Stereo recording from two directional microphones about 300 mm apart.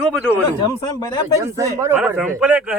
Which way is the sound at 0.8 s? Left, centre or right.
Centre.